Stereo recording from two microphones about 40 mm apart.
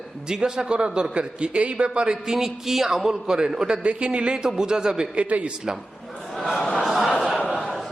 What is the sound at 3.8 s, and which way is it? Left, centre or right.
A man's voice, right.